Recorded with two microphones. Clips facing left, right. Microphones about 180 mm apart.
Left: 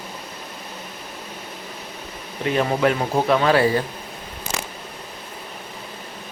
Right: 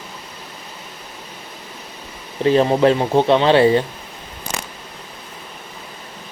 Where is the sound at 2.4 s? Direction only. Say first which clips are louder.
Right 6 dB; 30° right (ahead or behind).